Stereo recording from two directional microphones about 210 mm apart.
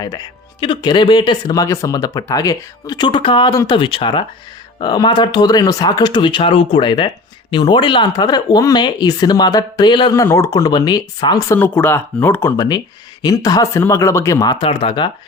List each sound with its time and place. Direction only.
0.6 s speech: 20° left (ahead or behind)